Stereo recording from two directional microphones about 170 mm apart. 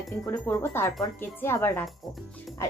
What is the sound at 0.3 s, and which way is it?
Speech, 15° left (ahead or behind).